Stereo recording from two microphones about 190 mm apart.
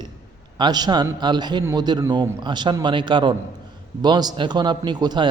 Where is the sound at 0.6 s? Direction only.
20° right (ahead or behind).